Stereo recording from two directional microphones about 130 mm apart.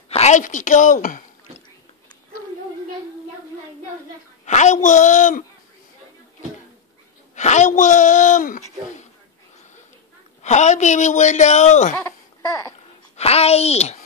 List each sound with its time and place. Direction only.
0.1 s speech: 60° left (ahead or behind); by 1.2 s 80° left
4.5 s speech: 65° left (ahead or behind)
7.3 s speech: 65° left (ahead or behind)
10.4 s speech: 60° left (ahead or behind)
13.1 s a child's voice: 50° left (ahead or behind)